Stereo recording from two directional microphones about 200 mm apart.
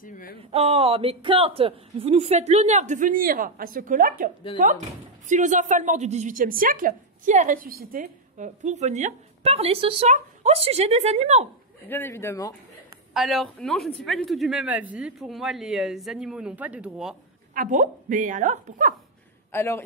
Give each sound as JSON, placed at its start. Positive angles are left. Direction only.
{"t": 0.0, "sound": "a sound", "side_deg": 45}
{"t": 0.5, "sound": "a woman's voice", "side_deg": -30}
{"t": 11.9, "sound": "speech", "side_deg": 10}
{"t": 13.1, "sound": "speech", "side_deg": 0}
{"t": 17.6, "sound": "a woman's voice", "side_deg": -40}
{"t": 19.5, "sound": "speech", "side_deg": 10}